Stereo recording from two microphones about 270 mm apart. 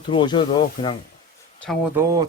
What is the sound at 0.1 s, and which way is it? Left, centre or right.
Speech, centre.